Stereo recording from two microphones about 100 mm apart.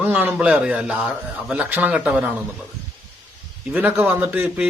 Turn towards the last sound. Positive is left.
turn(degrees=-5)  # may be behind; listen again after turning